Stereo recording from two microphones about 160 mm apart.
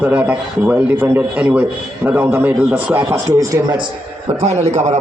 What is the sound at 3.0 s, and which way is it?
Speech, 20° right (ahead or behind).